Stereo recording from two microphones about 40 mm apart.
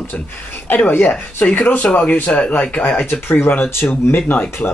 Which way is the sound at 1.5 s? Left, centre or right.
Left.